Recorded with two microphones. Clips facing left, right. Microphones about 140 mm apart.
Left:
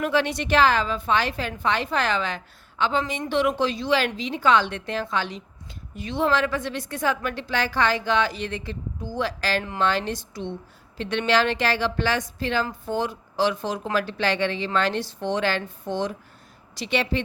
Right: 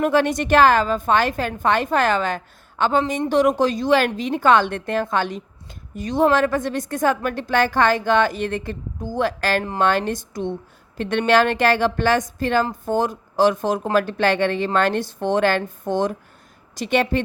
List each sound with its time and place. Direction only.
0.0 s a woman's voice: 50° right (ahead or behind)